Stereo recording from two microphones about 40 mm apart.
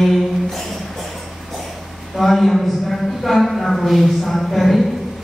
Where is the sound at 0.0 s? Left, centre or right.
Centre.